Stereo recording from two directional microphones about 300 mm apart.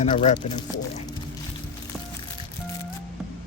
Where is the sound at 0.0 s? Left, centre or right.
Centre.